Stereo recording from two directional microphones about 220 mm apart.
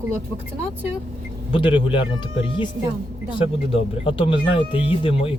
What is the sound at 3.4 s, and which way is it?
Speech, 25° left (ahead or behind).